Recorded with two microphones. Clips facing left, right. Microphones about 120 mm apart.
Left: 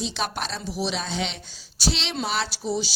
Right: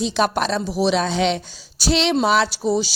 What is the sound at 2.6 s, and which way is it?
Speech, 45° right (ahead or behind).